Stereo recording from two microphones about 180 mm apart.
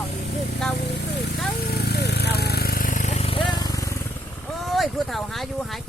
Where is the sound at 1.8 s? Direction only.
65° left (ahead or behind); by 3.7 s 25° left (ahead or behind).